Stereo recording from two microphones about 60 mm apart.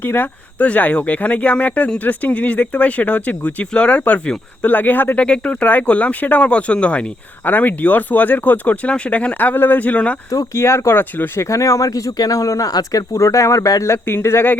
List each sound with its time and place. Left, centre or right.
0.0 s speech: left
0.6 s speech: left
5.2 s speech: centre
7.4 s speech: left
10.2 s speech: left
10.6 s speech: left
11.3 s speech: left
14.0 s speech: left